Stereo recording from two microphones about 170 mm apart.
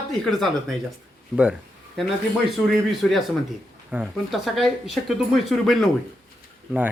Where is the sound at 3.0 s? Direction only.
5° left (ahead or behind).